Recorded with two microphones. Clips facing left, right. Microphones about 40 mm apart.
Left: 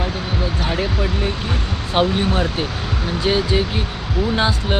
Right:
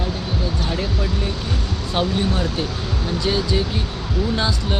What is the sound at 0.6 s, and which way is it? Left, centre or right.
Basketball bounce, left.